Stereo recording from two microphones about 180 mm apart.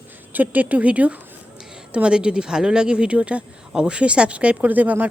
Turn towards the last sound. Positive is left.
turn(degrees=-10)  # may be behind; listen again after turning